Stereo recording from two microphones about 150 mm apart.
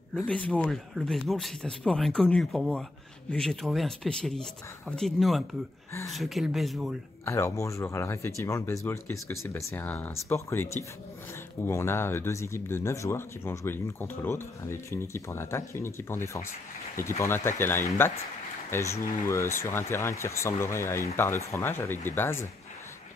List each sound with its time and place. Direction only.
0.1 s speech: 5° left (ahead or behind)
7.2 s speech: 20° left (ahead or behind)